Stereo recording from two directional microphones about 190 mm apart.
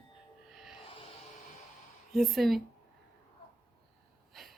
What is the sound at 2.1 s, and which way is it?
Speech, centre (ahead or behind).